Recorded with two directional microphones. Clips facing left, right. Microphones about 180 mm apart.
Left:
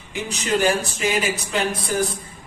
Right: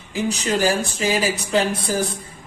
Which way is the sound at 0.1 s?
35° right (ahead or behind).